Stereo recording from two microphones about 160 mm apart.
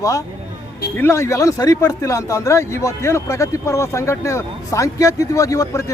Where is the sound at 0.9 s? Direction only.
15° left (ahead or behind).